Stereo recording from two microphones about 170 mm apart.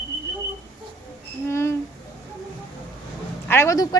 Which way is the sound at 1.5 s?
15° left (ahead or behind).